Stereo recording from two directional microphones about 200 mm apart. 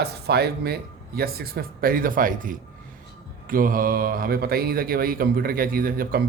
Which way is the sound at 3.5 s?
45° right (ahead or behind).